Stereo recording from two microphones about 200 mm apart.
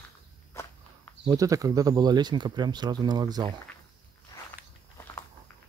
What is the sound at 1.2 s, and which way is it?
Speech, 15° right (ahead or behind).